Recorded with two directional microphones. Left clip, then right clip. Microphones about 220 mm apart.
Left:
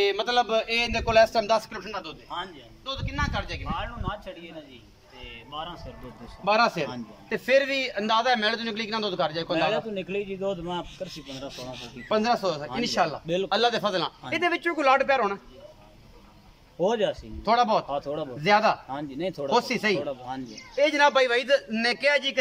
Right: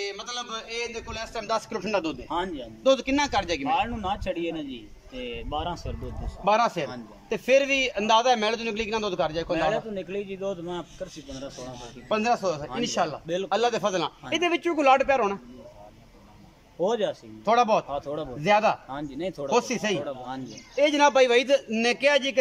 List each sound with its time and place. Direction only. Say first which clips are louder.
0.0 s a man's voice: left 10 dB; 40° left (ahead or behind)
1.9 s a man's voice: right 7 dB; 50° right (ahead or behind)
6.4 s a man's voice: even; 5° right (ahead or behind)
12.1 s a man's voice: even; 10° right (ahead or behind)
16.8 s speech: left 1 dB; centre (ahead or behind)
17.5 s a man's voice: right 1 dB; 10° right (ahead or behind)
17.8 s speech: left 1 dB; centre (ahead or behind)
18.4 s a man's voice: even; 10° right (ahead or behind)
18.9 s speech: left 1 dB; centre (ahead or behind)
19.5 s a man's voice: left 1 dB; 10° right (ahead or behind)
20.0 s speech: left 1 dB; centre (ahead or behind)
20.8 s a man's voice: right 1 dB; 10° right (ahead or behind)